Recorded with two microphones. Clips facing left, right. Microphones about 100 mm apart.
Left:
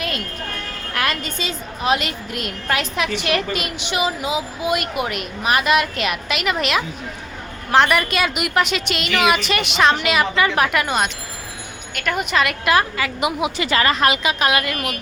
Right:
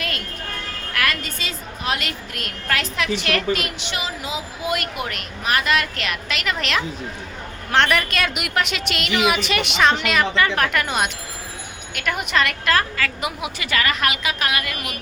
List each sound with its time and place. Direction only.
0.9 s a woman's voice: 25° left (ahead or behind); by 12.7 s 5° left (ahead or behind)
12.7 s a woman's voice: 15° left (ahead or behind)